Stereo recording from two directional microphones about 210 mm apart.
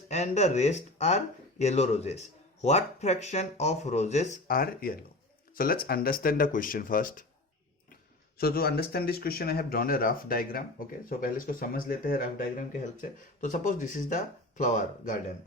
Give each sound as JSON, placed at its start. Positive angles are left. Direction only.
{"t": 0.1, "sound": "speech", "side_deg": 30}
{"t": 8.4, "sound": "speech", "side_deg": 45}